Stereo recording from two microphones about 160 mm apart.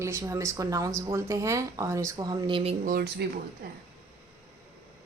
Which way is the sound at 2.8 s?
70° right (ahead or behind).